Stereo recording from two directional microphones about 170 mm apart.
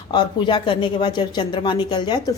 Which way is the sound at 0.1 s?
25° left (ahead or behind).